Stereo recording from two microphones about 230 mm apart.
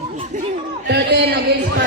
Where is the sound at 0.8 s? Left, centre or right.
Right.